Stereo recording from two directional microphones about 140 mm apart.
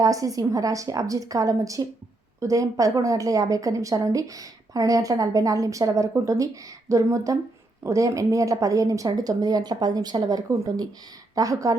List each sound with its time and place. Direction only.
0.0 s a woman's voice: 25° right (ahead or behind)